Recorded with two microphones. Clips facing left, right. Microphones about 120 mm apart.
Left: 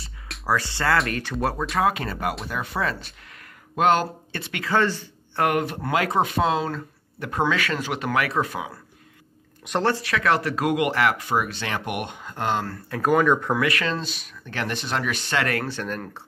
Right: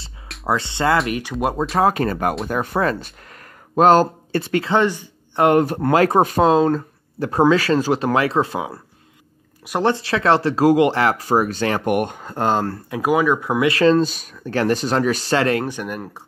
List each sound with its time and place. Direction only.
0.5 s speech: 20° right (ahead or behind)
1.7 s speech: 35° right (ahead or behind)
3.7 s speech: 35° right (ahead or behind)
4.6 s speech: 20° right (ahead or behind)
5.5 s speech: 35° right (ahead or behind)
9.7 s speech: 15° right (ahead or behind)
9.9 s speech: 30° right (ahead or behind)
12.9 s speech: 10° right (ahead or behind)
13.6 s speech: 30° right (ahead or behind); by 16.2 s 10° right (ahead or behind)